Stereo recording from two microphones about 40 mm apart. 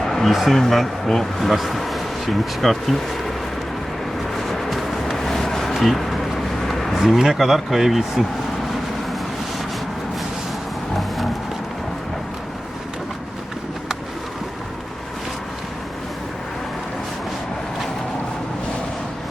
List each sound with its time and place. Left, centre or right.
0.0 s a sound: centre
0.3 s speech: centre
4.4 s music: centre
5.1 s vehicle: centre
5.7 s a sound: centre
6.7 s vehicle: centre
6.9 s speech: centre